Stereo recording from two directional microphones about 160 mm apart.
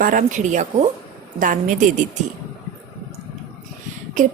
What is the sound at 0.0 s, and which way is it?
A woman's voice, 55° right (ahead or behind).